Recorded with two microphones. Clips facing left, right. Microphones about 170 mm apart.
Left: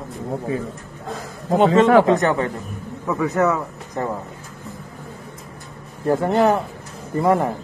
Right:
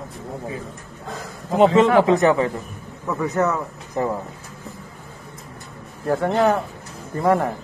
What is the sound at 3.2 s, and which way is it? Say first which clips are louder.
Speech: left 2 dB; centre (ahead or behind).